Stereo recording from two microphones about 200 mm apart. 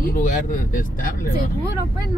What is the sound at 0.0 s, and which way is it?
Speech, 40° left (ahead or behind).